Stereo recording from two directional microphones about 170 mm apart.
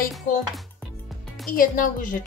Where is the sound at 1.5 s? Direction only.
55° left (ahead or behind).